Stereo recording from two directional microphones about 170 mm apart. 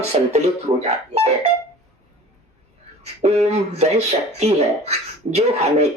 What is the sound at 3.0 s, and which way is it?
Speech, 40° right (ahead or behind).